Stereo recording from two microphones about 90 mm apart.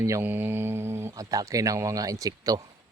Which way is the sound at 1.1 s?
40° right (ahead or behind).